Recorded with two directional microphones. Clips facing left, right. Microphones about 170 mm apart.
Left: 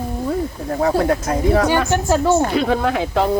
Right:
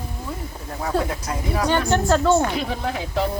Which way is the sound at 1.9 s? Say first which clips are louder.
Left 2 dB; 10° left (ahead or behind).